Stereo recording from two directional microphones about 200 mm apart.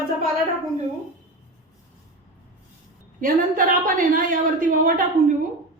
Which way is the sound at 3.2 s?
45° right (ahead or behind).